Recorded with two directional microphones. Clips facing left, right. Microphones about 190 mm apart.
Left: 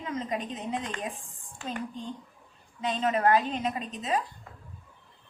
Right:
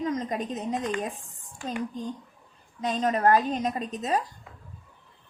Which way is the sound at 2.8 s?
40° right (ahead or behind).